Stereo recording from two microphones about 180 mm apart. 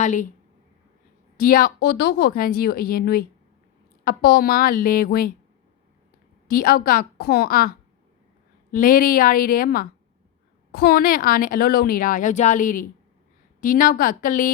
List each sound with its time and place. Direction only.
0.0 s a woman's voice: 45° left (ahead or behind)
1.4 s a woman's voice: 55° left (ahead or behind)
6.5 s a woman's voice: 55° left (ahead or behind)
8.7 s a woman's voice: 50° left (ahead or behind)